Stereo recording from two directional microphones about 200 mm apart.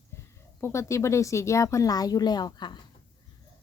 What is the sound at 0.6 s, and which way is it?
A woman's voice, 15° left (ahead or behind).